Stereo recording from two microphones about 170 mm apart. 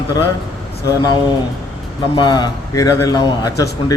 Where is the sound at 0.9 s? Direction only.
25° left (ahead or behind).